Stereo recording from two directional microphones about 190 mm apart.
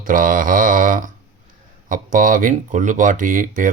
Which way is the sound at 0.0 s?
45° right (ahead or behind).